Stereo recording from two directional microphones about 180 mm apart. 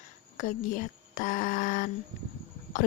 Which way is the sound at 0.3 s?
45° left (ahead or behind).